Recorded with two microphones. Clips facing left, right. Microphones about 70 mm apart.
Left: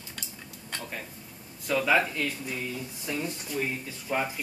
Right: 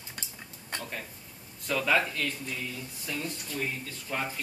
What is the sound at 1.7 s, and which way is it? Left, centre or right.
Speech, centre.